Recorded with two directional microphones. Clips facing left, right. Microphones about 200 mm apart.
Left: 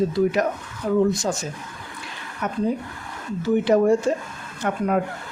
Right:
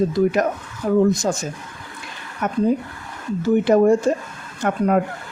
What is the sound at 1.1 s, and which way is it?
Speech, 45° right (ahead or behind).